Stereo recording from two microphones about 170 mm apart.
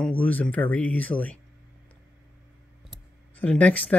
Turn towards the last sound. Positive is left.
turn(degrees=10)  # may be behind; listen again after turning